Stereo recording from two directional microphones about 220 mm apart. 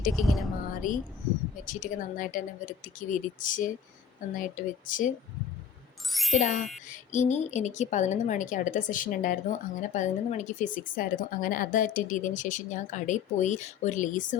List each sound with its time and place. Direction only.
0.2 s speech: centre (ahead or behind)
0.8 s a woman's voice: 40° left (ahead or behind)
6.1 s speech: centre (ahead or behind)
6.3 s a woman's voice: 35° left (ahead or behind)